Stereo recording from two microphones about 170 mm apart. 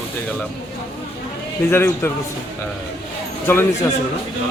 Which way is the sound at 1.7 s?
15° left (ahead or behind).